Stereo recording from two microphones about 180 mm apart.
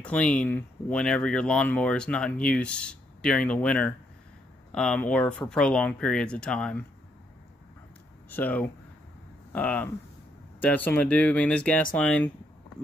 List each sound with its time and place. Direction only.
0.0 s speech: 5° left (ahead or behind)
8.3 s speech: 10° left (ahead or behind)